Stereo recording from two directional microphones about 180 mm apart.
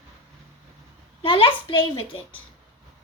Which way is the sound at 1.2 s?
30° left (ahead or behind).